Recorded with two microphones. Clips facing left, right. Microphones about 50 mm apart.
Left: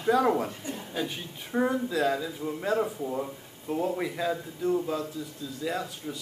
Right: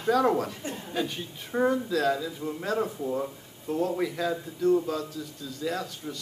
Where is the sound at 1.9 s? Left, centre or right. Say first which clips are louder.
Right 1 dB; centre.